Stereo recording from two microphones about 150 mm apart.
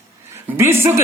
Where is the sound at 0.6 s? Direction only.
15° right (ahead or behind).